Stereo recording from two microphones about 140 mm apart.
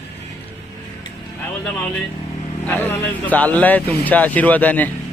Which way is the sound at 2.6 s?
10° left (ahead or behind).